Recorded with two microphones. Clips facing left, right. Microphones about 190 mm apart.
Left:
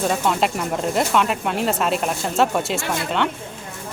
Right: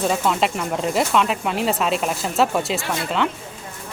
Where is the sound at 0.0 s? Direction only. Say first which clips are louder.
Even; centre (ahead or behind).